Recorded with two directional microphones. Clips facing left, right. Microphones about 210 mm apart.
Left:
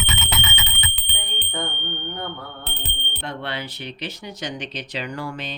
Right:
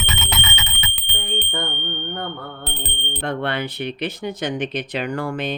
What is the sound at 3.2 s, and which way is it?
Speech, 55° right (ahead or behind).